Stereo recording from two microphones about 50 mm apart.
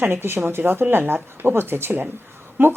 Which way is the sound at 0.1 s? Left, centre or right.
Right.